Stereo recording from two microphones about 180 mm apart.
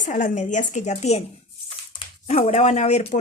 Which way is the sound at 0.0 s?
45° left (ahead or behind).